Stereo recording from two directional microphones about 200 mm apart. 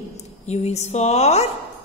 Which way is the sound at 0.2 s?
35° left (ahead or behind).